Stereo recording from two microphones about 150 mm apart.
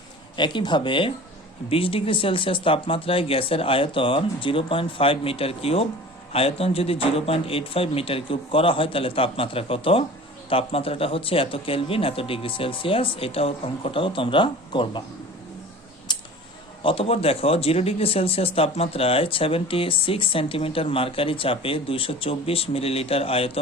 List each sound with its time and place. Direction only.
0.3 s speech: 30° left (ahead or behind)
16.1 s a sound: 30° left (ahead or behind)
16.8 s speech: 40° left (ahead or behind)